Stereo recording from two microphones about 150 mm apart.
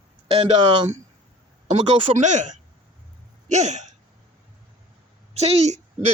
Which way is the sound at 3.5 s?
50° right (ahead or behind).